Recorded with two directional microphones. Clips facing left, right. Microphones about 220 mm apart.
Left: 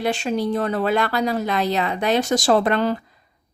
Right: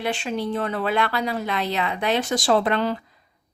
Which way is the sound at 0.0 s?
40° left (ahead or behind).